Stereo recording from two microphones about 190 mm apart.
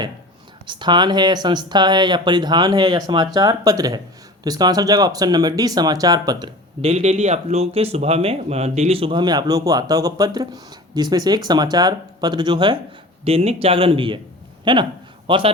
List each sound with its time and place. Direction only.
0.7 s speech: 25° right (ahead or behind)
6.8 s speech: 35° right (ahead or behind)